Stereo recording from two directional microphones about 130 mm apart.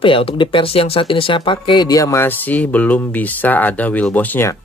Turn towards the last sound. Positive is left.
turn(degrees=15)  # may be behind; listen again after turning